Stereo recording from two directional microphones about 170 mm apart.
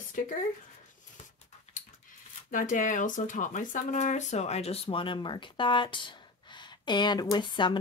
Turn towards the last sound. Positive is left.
turn(degrees=25)  # may be behind; listen again after turning